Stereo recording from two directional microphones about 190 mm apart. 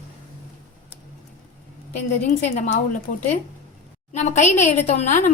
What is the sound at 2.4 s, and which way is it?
Speech, 40° left (ahead or behind).